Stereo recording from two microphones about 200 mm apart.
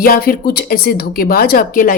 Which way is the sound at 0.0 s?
50° left (ahead or behind).